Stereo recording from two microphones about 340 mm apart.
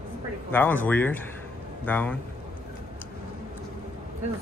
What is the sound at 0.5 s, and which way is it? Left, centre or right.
Speech, centre.